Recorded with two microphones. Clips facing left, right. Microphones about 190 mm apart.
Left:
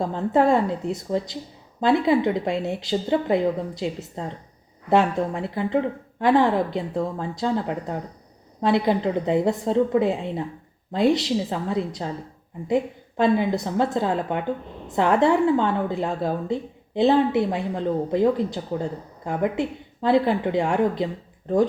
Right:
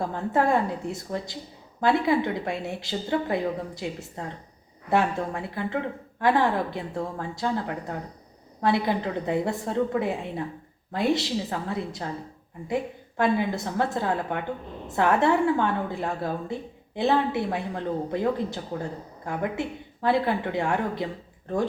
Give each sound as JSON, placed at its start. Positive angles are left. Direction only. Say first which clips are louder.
{"t": 0.0, "sound": "a woman's voice", "louder": "left 4 dB", "side_deg": 20}